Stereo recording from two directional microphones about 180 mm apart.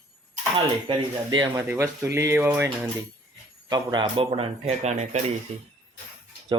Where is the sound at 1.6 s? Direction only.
10° right (ahead or behind).